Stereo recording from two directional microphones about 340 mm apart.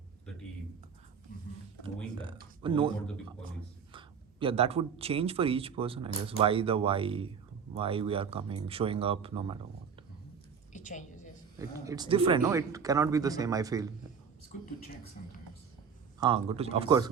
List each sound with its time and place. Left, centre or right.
2.1 s speech: centre
10.7 s a sound: left
11.9 s speech: centre
15.2 s speech: left
16.2 s speech: centre